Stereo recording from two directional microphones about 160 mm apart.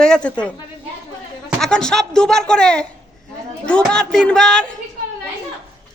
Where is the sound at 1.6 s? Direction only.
5° left (ahead or behind).